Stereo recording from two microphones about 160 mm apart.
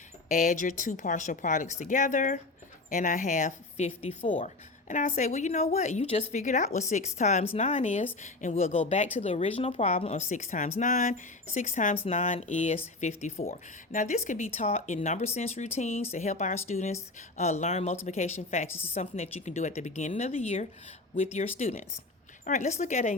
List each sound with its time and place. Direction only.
0.3 s speech: 50° left (ahead or behind)
4.4 s speech: 50° left (ahead or behind)
6.3 s speech: 50° left (ahead or behind)
18.7 s a woman's voice: 15° left (ahead or behind)
18.9 s speech: 40° left (ahead or behind)